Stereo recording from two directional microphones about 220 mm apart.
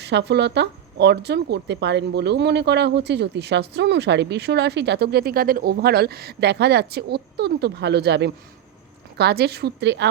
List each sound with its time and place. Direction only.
0.0 s speech: 50° right (ahead or behind)